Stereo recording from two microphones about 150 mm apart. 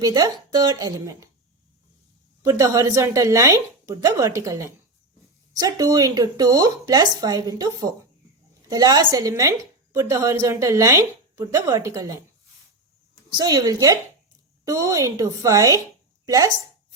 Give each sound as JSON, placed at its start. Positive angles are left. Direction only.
{"t": 0.0, "sound": "a woman's voice", "side_deg": -25}
{"t": 2.4, "sound": "a woman's voice", "side_deg": -25}
{"t": 13.3, "sound": "a woman's voice", "side_deg": -25}